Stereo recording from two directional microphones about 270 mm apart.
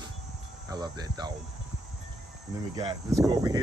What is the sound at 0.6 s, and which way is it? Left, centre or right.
Speech, centre.